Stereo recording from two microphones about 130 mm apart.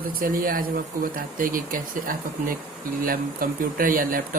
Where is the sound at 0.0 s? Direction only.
90° right.